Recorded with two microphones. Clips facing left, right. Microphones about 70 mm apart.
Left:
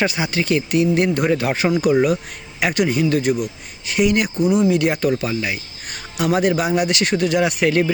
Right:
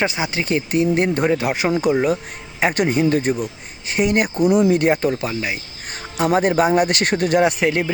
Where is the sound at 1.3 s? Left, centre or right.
Centre.